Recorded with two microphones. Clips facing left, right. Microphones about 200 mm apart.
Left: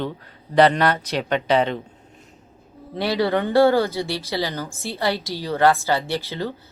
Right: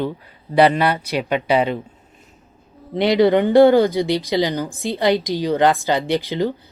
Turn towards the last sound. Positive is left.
turn(degrees=-15)  # may be behind; listen again after turning